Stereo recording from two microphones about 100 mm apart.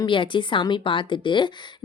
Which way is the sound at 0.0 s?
55° left (ahead or behind).